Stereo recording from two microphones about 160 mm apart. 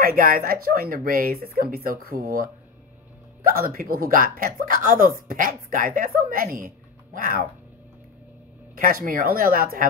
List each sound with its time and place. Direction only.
0.0 s speech: 65° right (ahead or behind)
8.7 s speech: 60° right (ahead or behind)